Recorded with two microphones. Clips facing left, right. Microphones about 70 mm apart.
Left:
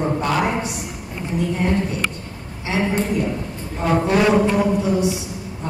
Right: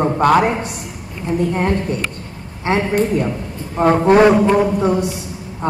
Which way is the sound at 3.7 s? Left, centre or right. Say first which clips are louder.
Right 7 dB; right.